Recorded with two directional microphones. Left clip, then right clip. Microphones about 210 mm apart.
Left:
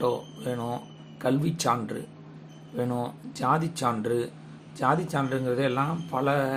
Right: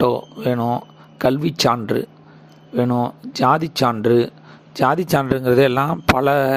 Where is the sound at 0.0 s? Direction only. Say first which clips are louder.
Right 10 dB; 40° right (ahead or behind).